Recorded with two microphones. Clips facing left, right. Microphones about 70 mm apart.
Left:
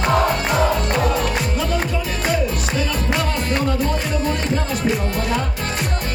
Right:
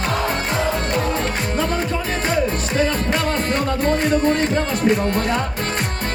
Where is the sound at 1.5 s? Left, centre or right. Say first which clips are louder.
Right 1 dB; right.